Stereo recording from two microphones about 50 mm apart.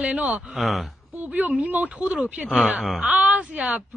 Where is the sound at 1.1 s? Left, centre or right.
Right.